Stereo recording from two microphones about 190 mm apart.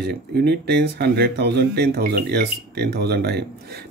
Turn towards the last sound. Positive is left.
turn(degrees=-55)  # may be behind; listen again after turning